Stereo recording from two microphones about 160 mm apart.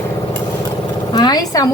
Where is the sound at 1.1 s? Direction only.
25° left (ahead or behind).